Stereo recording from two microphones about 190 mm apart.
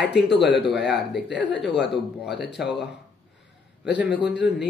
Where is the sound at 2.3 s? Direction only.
65° left (ahead or behind).